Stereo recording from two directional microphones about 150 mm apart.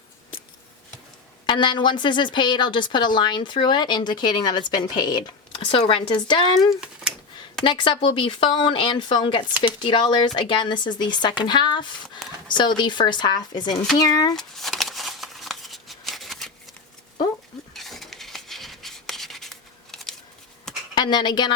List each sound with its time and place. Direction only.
1.5 s a woman's voice: 30° left (ahead or behind)
14.3 s shuffling cards: centre (ahead or behind)
17.7 s rub: centre (ahead or behind)
20.9 s a woman's voice: 30° left (ahead or behind)